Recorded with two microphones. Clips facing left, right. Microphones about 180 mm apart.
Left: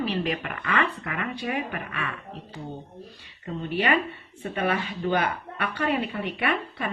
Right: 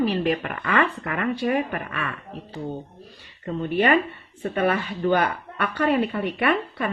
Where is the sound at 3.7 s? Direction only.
50° right (ahead or behind).